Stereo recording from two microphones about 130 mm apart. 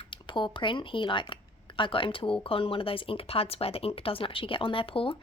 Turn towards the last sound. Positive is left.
turn(degrees=45)  # may be behind; listen again after turning